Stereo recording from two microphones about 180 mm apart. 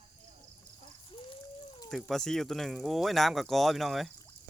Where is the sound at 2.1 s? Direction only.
5° left (ahead or behind).